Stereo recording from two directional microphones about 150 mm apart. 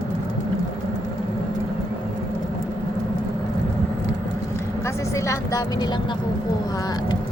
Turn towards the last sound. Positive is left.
turn(degrees=30)  # may be behind; listen again after turning